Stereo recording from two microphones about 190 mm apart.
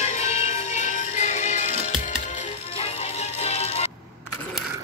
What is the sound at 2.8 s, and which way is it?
Music, 35° left (ahead or behind).